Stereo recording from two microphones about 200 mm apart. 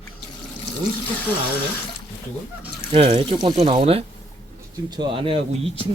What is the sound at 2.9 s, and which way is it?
A man's voice, 25° right (ahead or behind).